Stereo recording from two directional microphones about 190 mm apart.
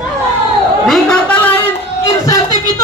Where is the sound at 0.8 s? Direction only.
Centre (ahead or behind).